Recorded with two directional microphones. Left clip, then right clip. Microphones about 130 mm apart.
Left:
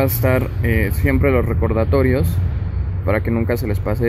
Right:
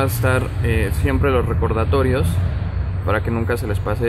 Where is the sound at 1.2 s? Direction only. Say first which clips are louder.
Even; 10° left (ahead or behind).